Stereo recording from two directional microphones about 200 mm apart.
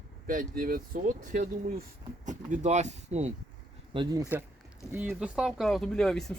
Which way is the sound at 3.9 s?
20° right (ahead or behind).